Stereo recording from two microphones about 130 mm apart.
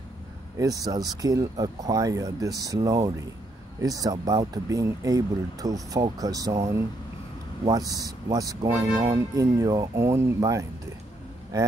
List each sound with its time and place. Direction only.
0.6 s speech: 30° right (ahead or behind)